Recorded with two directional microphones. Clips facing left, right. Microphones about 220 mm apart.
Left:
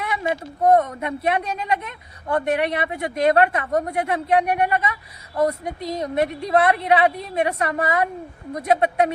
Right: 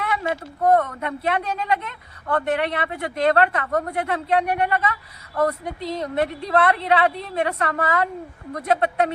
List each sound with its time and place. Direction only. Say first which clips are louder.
0.0 s a woman's voice: even; 15° left (ahead or behind)